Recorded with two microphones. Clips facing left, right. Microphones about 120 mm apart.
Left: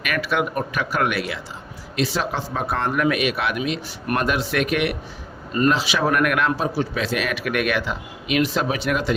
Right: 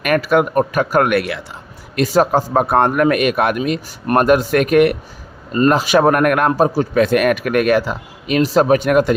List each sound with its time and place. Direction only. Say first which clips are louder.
0.0 s speech: right 8 dB; 45° right (ahead or behind)
2.0 s speech: right 9 dB; 45° right (ahead or behind)